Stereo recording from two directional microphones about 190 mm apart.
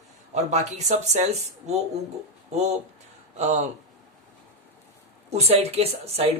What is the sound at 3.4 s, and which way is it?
Speech, 35° right (ahead or behind).